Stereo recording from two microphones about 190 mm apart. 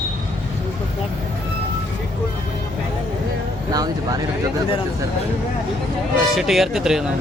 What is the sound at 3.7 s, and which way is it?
Speech, 20° right (ahead or behind).